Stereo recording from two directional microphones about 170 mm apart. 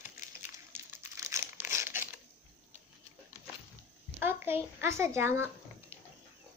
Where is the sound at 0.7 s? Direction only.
15° right (ahead or behind).